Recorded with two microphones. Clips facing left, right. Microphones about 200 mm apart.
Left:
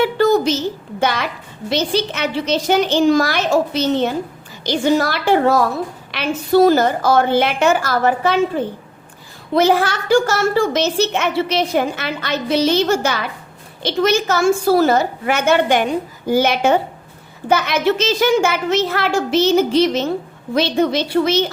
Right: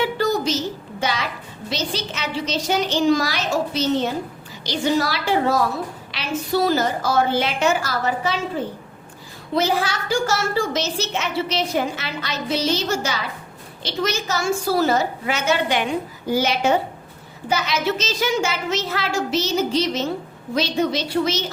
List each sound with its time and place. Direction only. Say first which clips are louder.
0.2 s a sound: left 7 dB; 55° left (ahead or behind)
0.9 s a woman's voice: left 5 dB; 60° left (ahead or behind)
9.6 s a woman's voice: left 6 dB; 55° left (ahead or behind)